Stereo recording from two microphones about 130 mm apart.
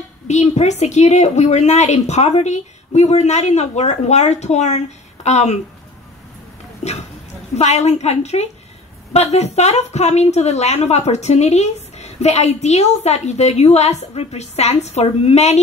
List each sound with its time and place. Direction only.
0.3 s a woman's voice: 60° left (ahead or behind)
6.8 s a woman's voice: 55° left (ahead or behind)